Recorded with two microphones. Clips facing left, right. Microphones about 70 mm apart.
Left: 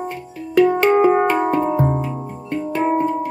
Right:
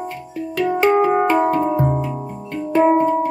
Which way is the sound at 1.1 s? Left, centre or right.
Centre.